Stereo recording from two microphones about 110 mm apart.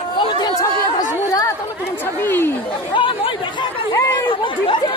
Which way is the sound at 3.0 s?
50° left (ahead or behind).